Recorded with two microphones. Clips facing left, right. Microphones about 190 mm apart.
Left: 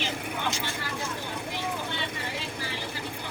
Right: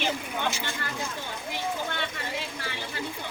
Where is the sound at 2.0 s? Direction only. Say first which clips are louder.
Right 1 dB; 60° right (ahead or behind).